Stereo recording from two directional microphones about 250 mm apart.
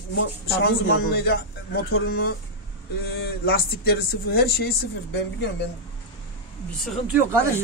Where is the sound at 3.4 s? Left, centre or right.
Left.